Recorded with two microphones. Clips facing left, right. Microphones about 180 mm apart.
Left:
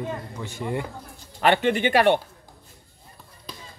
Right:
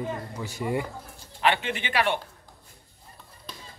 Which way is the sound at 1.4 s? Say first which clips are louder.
Left 6 dB; 50° left (ahead or behind).